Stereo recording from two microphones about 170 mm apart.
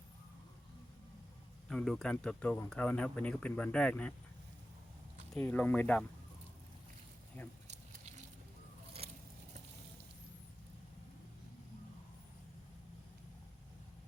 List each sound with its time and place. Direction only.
1.7 s speech: 5° left (ahead or behind)
5.3 s speech: 10° left (ahead or behind)
7.7 s a sound: 40° right (ahead or behind)